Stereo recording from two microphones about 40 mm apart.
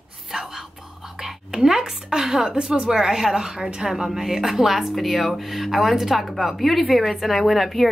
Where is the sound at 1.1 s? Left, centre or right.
Centre.